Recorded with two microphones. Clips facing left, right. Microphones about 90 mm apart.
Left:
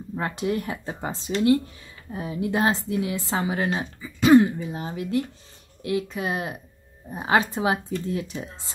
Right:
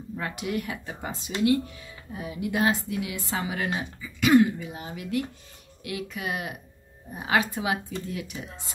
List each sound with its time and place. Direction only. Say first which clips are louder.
0.1 s a woman's voice: left 4 dB; 35° left (ahead or behind)